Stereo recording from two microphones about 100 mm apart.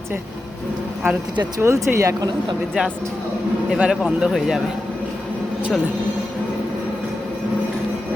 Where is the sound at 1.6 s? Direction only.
25° right (ahead or behind).